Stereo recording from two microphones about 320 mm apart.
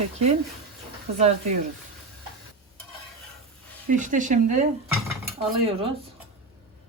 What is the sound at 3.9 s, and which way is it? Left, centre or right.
Speech, right.